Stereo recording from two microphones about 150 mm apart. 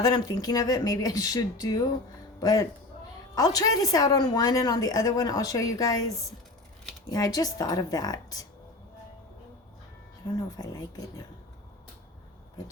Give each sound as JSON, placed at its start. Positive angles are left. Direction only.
{"t": 0.0, "sound": "a woman's voice", "side_deg": 25}
{"t": 7.1, "sound": "a woman's voice", "side_deg": 25}
{"t": 10.2, "sound": "a woman's voice", "side_deg": 25}